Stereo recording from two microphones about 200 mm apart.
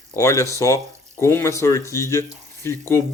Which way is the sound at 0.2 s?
15° left (ahead or behind).